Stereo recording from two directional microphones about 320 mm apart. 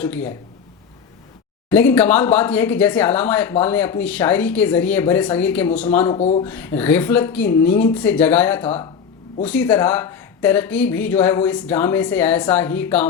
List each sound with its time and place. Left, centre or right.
0.0 s speech: centre
1.7 s speech: centre
6.1 s speech: centre
6.4 s speech: centre